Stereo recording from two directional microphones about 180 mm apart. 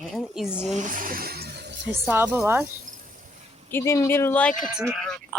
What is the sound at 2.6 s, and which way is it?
Cricket, 50° right (ahead or behind).